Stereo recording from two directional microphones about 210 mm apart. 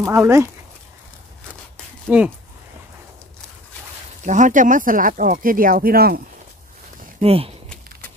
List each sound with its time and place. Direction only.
0.0 s speech: 15° right (ahead or behind)
2.0 s speech: 10° right (ahead or behind)
4.2 s speech: 35° right (ahead or behind)
7.2 s speech: 30° right (ahead or behind)